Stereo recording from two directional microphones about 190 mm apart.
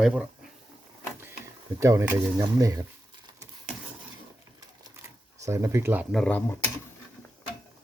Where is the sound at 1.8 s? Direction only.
15° right (ahead or behind).